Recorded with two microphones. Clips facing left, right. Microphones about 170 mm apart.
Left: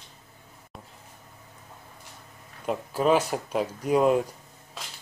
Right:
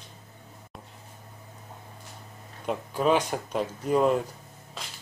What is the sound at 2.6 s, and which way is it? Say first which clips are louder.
Speech: left 1 dB; 5° left (ahead or behind).